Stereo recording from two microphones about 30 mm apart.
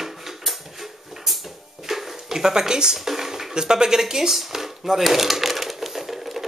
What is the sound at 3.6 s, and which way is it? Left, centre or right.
Speech, right.